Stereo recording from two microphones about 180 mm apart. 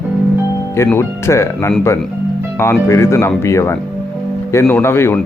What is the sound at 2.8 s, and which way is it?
Speech, 15° left (ahead or behind).